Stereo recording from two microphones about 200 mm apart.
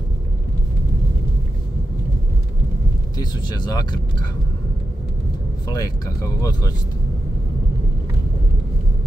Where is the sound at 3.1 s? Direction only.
20° left (ahead or behind).